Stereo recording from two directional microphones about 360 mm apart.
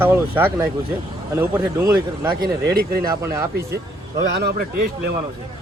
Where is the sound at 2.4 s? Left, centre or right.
Right.